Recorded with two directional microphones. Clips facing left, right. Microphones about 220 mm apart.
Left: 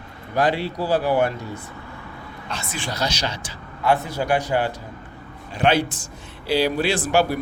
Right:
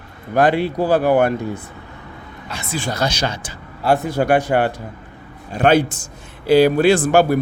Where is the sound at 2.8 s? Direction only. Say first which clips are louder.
Right 5 dB; 50° right (ahead or behind).